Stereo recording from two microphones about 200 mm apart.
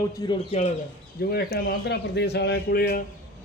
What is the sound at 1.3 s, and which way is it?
Speech, 50° left (ahead or behind).